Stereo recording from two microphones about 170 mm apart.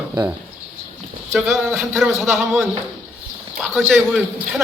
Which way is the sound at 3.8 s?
10° right (ahead or behind).